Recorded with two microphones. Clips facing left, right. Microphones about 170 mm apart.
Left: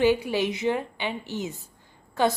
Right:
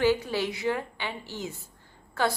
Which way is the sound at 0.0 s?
15° left (ahead or behind).